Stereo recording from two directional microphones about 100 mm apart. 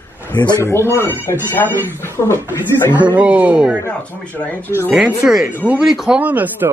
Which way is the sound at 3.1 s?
15° right (ahead or behind).